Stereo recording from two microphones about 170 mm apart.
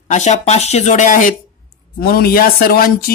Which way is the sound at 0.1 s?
45° left (ahead or behind).